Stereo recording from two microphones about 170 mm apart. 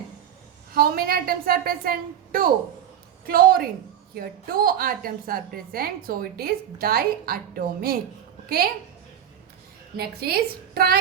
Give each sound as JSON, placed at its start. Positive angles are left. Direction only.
{"t": 0.7, "sound": "a woman's voice", "side_deg": -60}
{"t": 10.0, "sound": "a woman's voice", "side_deg": -65}